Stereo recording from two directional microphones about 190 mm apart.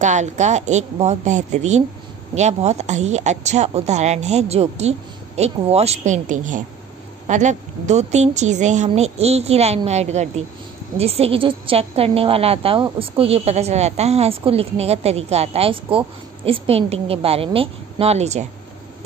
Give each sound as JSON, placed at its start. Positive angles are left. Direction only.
{"t": 0.0, "sound": "a woman's voice", "side_deg": -40}